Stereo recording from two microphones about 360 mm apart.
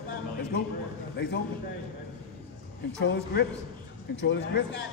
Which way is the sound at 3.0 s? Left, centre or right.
Left.